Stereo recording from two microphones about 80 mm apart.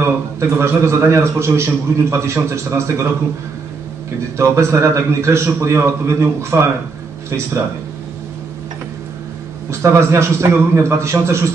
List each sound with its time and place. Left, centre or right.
0.4 s a man's voice: right
4.4 s a man's voice: right
9.7 s a man's voice: right